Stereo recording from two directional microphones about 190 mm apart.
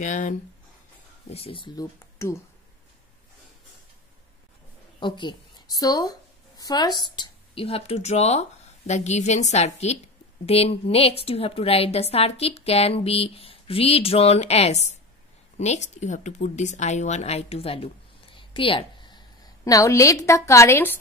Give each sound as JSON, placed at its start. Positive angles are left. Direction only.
{"t": 0.0, "sound": "a woman's voice", "side_deg": 40}
{"t": 1.3, "sound": "speech", "side_deg": 30}
{"t": 2.0, "sound": "speech", "side_deg": 15}
{"t": 5.0, "sound": "a woman's voice", "side_deg": 25}